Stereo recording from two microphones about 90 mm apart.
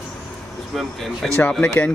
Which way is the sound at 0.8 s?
Centre (ahead or behind).